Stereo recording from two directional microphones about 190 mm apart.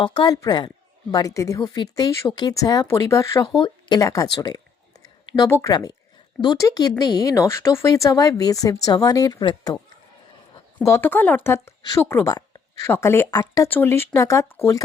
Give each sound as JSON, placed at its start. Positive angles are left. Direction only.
{"t": 0.0, "sound": "speech", "side_deg": 25}
{"t": 10.8, "sound": "speech", "side_deg": 15}